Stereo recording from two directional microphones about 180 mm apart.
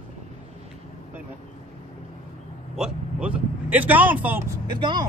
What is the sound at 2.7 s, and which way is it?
Speech, 5° right (ahead or behind).